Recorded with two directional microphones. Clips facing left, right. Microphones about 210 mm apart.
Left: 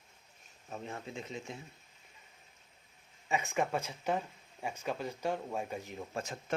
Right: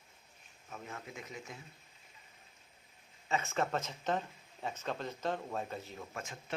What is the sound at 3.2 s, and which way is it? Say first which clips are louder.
Speech: left 1 dB; 15° left (ahead or behind).